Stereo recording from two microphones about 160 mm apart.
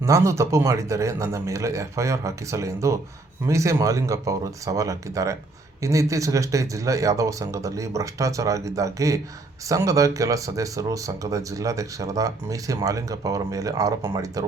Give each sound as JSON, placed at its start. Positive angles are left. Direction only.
{"t": 0.0, "sound": "speech", "side_deg": -20}